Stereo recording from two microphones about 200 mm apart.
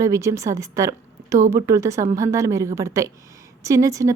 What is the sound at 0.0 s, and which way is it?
A woman's voice, 15° right (ahead or behind).